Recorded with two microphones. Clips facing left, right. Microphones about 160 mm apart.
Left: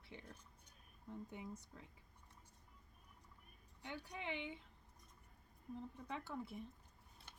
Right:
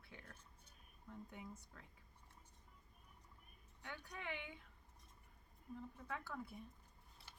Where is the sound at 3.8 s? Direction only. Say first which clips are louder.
Left 3 dB; 15° left (ahead or behind).